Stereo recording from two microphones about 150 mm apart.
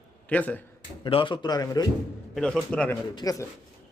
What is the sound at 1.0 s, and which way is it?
Speech, 35° left (ahead or behind).